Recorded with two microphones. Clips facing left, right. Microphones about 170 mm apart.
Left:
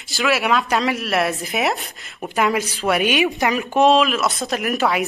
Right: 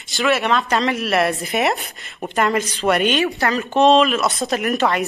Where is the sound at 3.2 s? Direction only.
15° left (ahead or behind).